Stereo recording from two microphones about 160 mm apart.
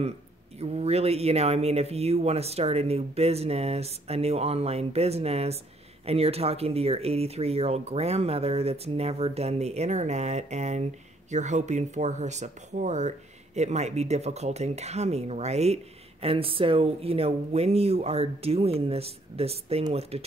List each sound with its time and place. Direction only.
0.6 s speech: 40° right (ahead or behind)